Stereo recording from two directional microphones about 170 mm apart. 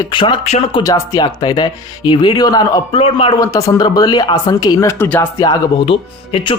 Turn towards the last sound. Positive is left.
turn(degrees=30)  # may be behind; listen again after turning